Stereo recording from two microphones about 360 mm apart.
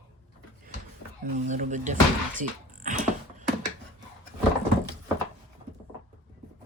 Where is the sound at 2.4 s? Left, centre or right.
Right.